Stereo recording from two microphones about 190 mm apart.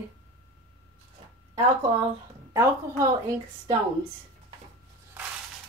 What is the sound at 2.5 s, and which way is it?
Speech, 15° right (ahead or behind).